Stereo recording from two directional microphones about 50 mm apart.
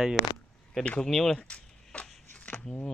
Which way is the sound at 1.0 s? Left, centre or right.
Centre.